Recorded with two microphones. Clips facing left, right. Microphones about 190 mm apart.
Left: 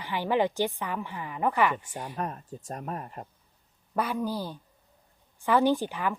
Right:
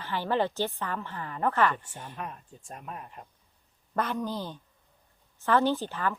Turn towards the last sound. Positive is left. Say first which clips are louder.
# left 2 dB
turn(degrees=15)  # may be behind; listen again after turning